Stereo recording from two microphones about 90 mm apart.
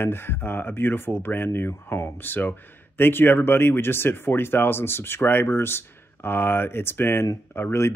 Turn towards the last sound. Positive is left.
turn(degrees=25)  # may be behind; listen again after turning